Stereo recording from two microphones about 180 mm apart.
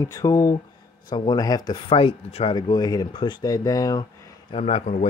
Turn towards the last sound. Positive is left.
turn(degrees=35)  # may be behind; listen again after turning